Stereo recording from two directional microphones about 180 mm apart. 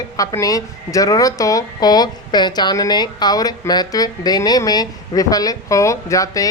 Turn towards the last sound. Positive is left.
turn(degrees=20)  # may be behind; listen again after turning